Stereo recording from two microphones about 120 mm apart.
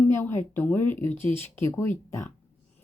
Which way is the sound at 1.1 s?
45° right (ahead or behind).